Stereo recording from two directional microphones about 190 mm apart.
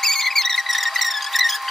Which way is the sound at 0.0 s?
Centre (ahead or behind).